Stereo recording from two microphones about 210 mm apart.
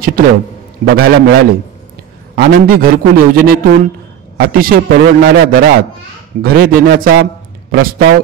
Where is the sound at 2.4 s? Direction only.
45° right (ahead or behind).